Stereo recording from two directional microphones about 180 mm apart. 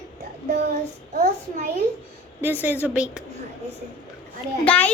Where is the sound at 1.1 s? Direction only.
40° right (ahead or behind).